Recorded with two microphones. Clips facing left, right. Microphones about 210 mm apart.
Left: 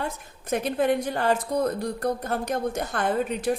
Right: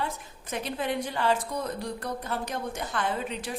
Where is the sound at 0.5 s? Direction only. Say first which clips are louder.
Left 7 dB; 50° left (ahead or behind).